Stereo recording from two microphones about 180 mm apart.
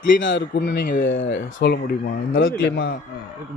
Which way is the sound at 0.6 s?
55° left (ahead or behind).